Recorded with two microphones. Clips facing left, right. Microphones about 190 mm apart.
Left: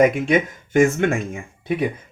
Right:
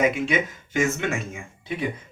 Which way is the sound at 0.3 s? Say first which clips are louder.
Left 6 dB; 50° left (ahead or behind).